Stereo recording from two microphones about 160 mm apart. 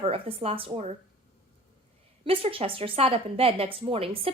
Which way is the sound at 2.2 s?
35° right (ahead or behind).